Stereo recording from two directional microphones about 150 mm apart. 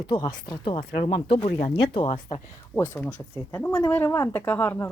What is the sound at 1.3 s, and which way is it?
Speech, 40° left (ahead or behind).